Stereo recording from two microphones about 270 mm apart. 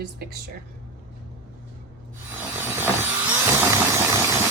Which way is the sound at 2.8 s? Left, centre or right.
Centre.